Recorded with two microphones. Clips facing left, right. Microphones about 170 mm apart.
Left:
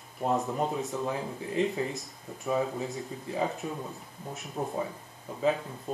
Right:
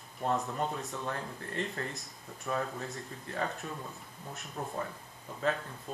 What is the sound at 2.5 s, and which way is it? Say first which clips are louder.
Speech: left 6 dB; 15° left (ahead or behind).